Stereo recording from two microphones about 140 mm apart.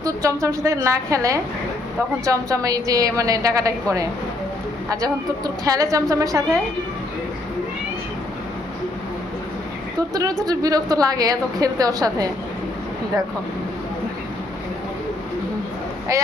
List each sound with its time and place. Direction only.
0.0 s a woman's voice: 25° right (ahead or behind)
10.2 s a woman's voice: 25° right (ahead or behind)